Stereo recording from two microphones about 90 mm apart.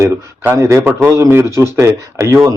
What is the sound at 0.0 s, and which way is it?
A man's voice, 30° right (ahead or behind).